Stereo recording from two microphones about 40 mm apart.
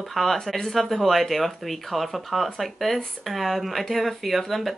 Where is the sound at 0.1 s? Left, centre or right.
Centre.